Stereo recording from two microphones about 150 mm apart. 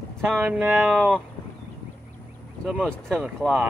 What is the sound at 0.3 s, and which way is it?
Speech, 10° right (ahead or behind).